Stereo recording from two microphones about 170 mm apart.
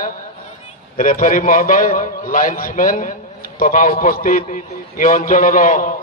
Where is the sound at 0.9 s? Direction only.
55° left (ahead or behind).